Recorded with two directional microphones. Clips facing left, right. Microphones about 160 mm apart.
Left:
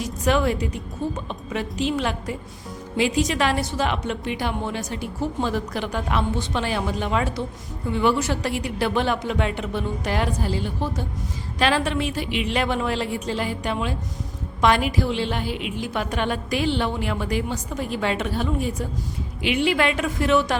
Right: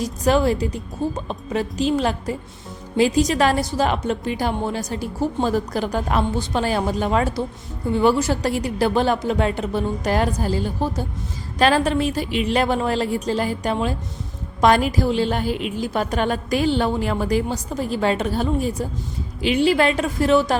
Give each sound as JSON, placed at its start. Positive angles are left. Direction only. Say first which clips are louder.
{"t": 0.0, "sound": "a woman's voice", "louder": "right 3 dB", "side_deg": -35}